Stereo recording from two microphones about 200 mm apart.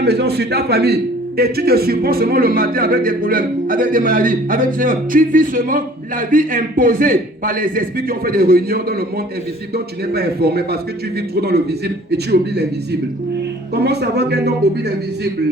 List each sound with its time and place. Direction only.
0.0 s a man's voice: 55° right (ahead or behind)